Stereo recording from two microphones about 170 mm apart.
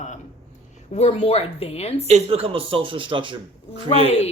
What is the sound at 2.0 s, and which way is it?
Speech, 35° right (ahead or behind).